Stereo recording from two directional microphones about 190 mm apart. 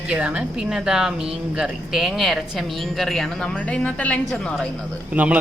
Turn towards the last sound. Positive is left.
turn(degrees=-10)  # may be behind; listen again after turning